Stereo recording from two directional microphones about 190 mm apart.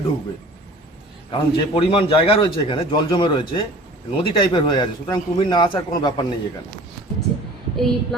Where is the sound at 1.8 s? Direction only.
30° left (ahead or behind).